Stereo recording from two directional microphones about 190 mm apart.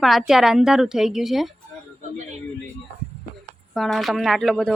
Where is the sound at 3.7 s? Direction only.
Centre (ahead or behind).